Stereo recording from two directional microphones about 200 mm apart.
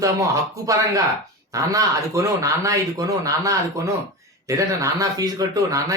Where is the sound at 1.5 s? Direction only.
15° right (ahead or behind).